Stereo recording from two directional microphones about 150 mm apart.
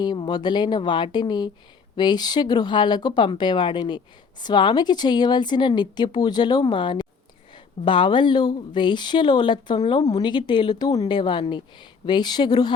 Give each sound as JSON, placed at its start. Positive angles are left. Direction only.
{"t": 0.0, "sound": "speech", "side_deg": 30}